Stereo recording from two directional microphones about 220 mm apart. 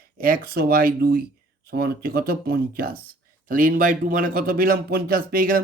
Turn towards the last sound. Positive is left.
turn(degrees=-40)  # may be behind; listen again after turning